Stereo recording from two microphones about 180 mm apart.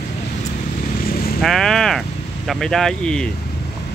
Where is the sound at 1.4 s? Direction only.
Centre (ahead or behind).